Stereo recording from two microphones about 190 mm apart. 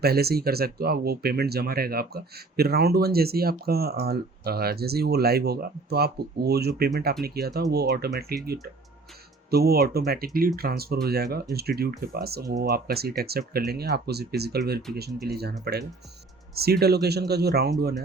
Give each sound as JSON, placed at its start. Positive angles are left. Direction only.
{"t": 0.0, "sound": "speech", "side_deg": -55}
{"t": 9.5, "sound": "speech", "side_deg": -55}
{"t": 16.6, "sound": "speech", "side_deg": -55}